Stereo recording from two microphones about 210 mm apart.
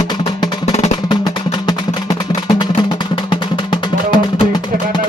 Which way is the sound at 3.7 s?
20° left (ahead or behind).